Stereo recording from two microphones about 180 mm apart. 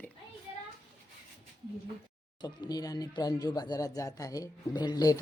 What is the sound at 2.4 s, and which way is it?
Speech, 20° left (ahead or behind).